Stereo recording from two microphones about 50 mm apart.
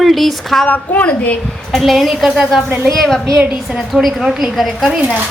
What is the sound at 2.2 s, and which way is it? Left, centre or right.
Speech, centre.